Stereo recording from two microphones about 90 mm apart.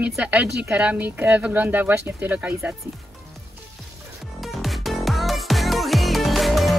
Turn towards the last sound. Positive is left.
turn(degrees=0)  # may be behind; listen again after turning